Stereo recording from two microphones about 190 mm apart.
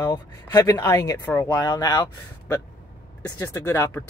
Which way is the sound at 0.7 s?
20° left (ahead or behind).